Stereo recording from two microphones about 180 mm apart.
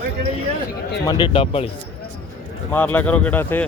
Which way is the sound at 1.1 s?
25° left (ahead or behind).